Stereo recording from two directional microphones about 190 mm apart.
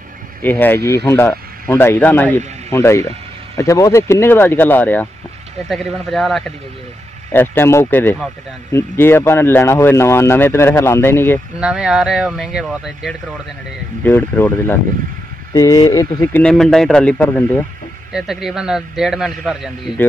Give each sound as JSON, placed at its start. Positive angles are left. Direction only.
{"t": 0.4, "sound": "a man's voice", "side_deg": 10}
{"t": 7.3, "sound": "a man's voice", "side_deg": 10}
{"t": 11.6, "sound": "a man's voice", "side_deg": -5}
{"t": 14.0, "sound": "a man's voice", "side_deg": 10}
{"t": 16.4, "sound": "a man's voice", "side_deg": 0}
{"t": 18.1, "sound": "a man's voice", "side_deg": 0}